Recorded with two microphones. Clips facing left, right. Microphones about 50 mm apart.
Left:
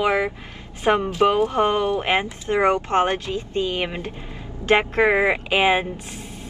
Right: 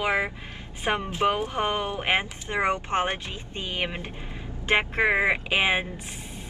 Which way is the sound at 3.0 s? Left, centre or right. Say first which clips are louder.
Left 7 dB; right.